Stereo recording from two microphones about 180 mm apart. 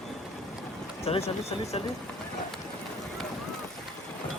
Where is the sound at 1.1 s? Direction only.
35° left (ahead or behind).